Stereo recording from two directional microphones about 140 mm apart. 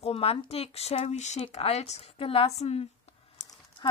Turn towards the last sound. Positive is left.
turn(degrees=30)  # may be behind; listen again after turning